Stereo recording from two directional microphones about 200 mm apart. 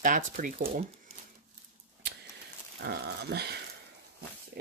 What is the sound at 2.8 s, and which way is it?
Speech, 55° right (ahead or behind).